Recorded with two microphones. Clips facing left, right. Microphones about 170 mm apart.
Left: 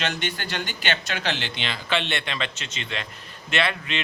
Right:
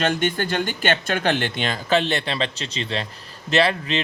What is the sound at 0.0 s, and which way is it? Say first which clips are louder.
Speech: right 7 dB; 50° right (ahead or behind).